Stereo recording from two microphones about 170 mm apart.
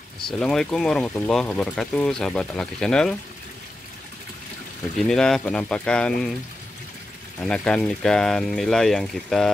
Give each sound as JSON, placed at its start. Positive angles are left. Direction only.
{"t": 0.3, "sound": "speech", "side_deg": 5}
{"t": 4.9, "sound": "speech", "side_deg": 5}
{"t": 7.3, "sound": "speech", "side_deg": 5}